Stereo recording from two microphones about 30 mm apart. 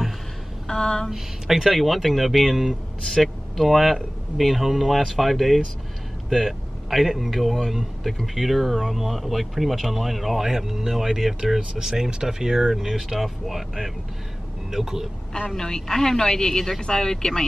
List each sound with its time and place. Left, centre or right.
0.7 s a sound: left
1.1 s speech: centre
1.8 s speech: centre
11.9 s speech: right
13.2 s speech: centre
14.7 s speech: centre
15.5 s a woman's voice: centre